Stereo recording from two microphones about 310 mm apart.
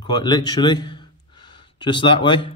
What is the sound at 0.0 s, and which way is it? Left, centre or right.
Speech, centre.